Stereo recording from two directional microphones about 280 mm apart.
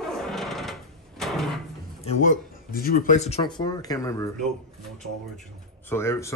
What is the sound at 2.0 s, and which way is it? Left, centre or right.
Speech, left.